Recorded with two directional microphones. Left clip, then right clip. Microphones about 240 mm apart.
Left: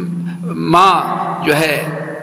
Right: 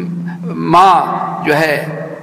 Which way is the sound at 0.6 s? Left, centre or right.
Left.